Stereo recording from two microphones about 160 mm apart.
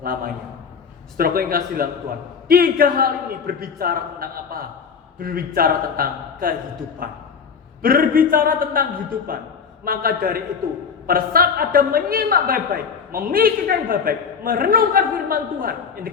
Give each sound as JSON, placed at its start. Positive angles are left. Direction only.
{"t": 0.0, "sound": "a woman's voice", "side_deg": -65}